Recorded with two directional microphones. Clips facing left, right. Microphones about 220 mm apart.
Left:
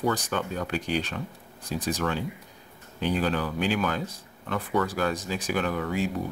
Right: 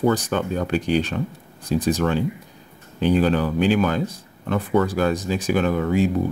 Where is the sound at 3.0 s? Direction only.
25° right (ahead or behind).